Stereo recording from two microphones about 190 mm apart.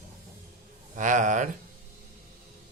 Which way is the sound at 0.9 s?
40° right (ahead or behind).